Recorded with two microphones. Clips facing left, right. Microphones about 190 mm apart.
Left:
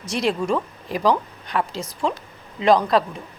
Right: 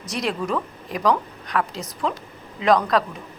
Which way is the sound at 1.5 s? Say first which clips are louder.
Even; 30° left (ahead or behind).